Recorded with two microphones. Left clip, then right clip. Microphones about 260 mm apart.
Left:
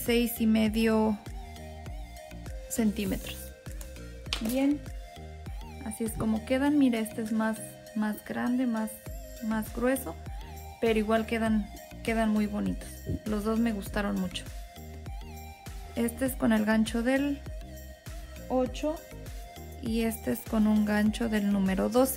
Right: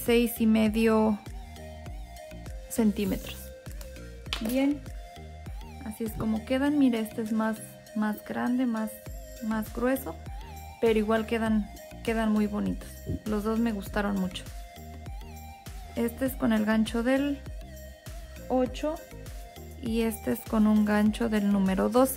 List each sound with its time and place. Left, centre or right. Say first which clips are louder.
0.0 s speech: right 3 dB; centre
2.8 s speech: right 3 dB; centre
4.3 s music: even; right
5.8 s speech: left 1 dB; centre
7.1 s speech: right 2 dB; centre
8.0 s speech: right 2 dB; centre
8.6 s speech: right 1 dB; centre
16.0 s speech: right 1 dB; centre
18.5 s speech: right 1 dB; centre